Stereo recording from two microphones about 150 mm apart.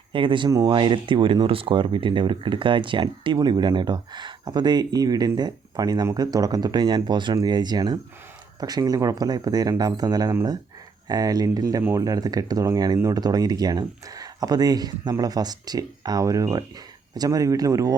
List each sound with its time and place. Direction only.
0.1 s speech: 35° right (ahead or behind)